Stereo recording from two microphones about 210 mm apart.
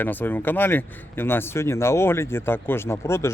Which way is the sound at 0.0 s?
10° left (ahead or behind).